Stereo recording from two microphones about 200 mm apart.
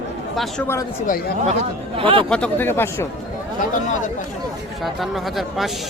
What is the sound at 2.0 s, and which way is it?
Speech, 25° right (ahead or behind).